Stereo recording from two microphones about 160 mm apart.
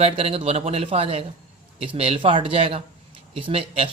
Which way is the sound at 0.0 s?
40° right (ahead or behind).